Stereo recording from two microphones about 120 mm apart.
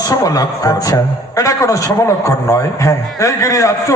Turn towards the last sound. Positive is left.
turn(degrees=25)  # may be behind; listen again after turning